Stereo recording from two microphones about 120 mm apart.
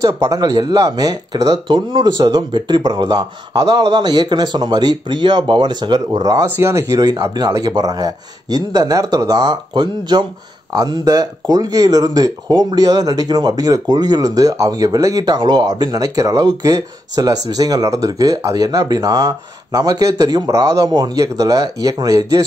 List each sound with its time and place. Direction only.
0.0 s speech: 30° right (ahead or behind)
1.9 s speech: 45° right (ahead or behind)
6.5 s speech: 25° right (ahead or behind)